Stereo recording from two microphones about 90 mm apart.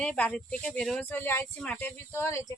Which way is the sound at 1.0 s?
25° left (ahead or behind).